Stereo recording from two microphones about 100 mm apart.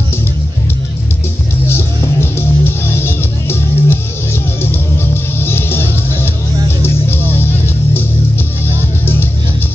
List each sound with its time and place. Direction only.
1.7 s music: 25° left (ahead or behind)
7.3 s music: 20° left (ahead or behind)